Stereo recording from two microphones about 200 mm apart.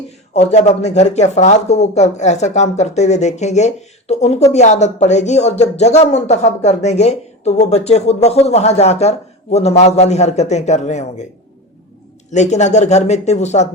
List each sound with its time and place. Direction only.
0.3 s speech: 35° left (ahead or behind)
12.3 s speech: 35° left (ahead or behind)